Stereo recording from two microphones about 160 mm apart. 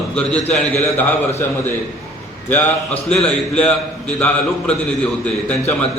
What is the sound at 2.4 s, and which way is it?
A man's voice, 10° left (ahead or behind).